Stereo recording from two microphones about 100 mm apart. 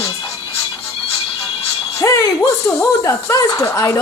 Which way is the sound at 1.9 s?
30° left (ahead or behind).